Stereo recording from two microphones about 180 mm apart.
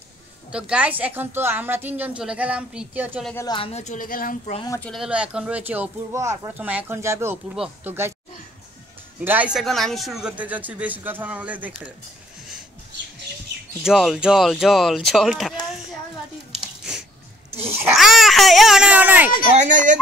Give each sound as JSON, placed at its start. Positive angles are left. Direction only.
{"t": 0.5, "sound": "a woman's voice", "side_deg": -5}
{"t": 3.3, "sound": "speech", "side_deg": 25}
{"t": 4.6, "sound": "a woman's voice", "side_deg": 10}
{"t": 9.2, "sound": "a woman's voice", "side_deg": -10}
{"t": 13.8, "sound": "speech", "side_deg": 0}
{"t": 17.9, "sound": "a child's voice", "side_deg": 0}
{"t": 19.5, "sound": "speech", "side_deg": -40}